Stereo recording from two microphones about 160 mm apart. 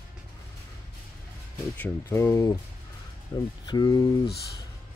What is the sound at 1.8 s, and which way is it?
Speech, 15° left (ahead or behind).